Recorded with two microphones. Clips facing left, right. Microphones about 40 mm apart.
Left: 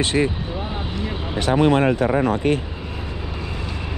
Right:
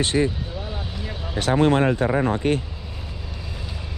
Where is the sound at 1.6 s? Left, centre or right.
Left.